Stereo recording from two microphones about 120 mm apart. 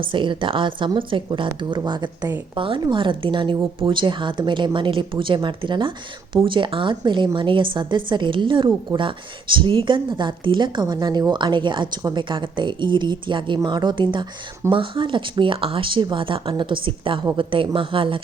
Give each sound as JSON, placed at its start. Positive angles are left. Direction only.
{"t": 0.1, "sound": "a woman's voice", "side_deg": -45}